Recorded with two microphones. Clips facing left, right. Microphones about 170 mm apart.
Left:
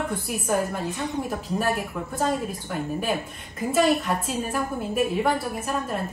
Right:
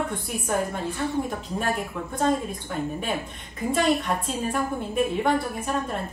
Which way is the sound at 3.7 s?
5° left (ahead or behind).